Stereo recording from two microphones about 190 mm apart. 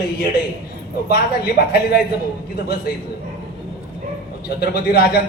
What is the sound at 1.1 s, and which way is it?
Speech, 55° left (ahead or behind).